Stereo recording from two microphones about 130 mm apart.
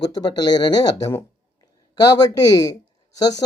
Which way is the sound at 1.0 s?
20° left (ahead or behind).